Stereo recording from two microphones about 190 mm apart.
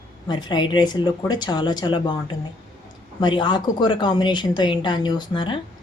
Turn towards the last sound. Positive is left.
turn(degrees=25)  # may be behind; listen again after turning